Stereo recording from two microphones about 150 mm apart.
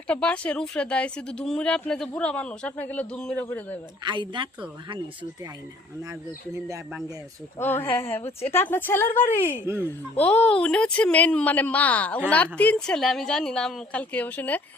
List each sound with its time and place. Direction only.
0.1 s speech: 10° left (ahead or behind)
4.0 s a woman's voice: 30° right (ahead or behind)
6.0 s speech: 20° right (ahead or behind)
7.6 s speech: 15° left (ahead or behind)
9.6 s speech: 15° right (ahead or behind)
10.2 s a woman's voice: 10° left (ahead or behind)